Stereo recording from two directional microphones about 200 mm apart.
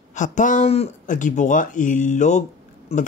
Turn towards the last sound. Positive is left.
turn(degrees=30)  # may be behind; listen again after turning